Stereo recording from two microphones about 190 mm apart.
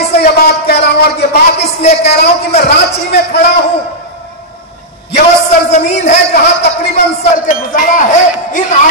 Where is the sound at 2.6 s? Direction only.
60° left (ahead or behind).